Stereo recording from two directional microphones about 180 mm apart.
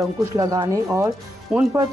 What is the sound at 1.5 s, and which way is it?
Speech, 5° right (ahead or behind).